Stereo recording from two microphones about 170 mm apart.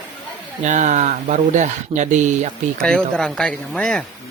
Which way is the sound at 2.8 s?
5° left (ahead or behind).